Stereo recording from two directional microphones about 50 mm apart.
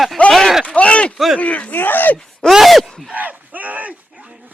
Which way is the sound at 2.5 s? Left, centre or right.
Centre.